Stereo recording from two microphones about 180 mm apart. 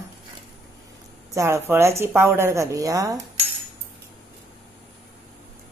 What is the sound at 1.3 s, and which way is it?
Speech, 15° right (ahead or behind).